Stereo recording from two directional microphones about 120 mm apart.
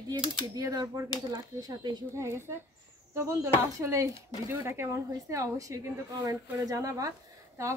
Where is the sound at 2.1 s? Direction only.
20° right (ahead or behind).